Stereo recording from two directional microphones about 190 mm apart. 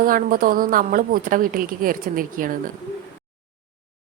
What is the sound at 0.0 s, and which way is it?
A woman's voice, 50° right (ahead or behind).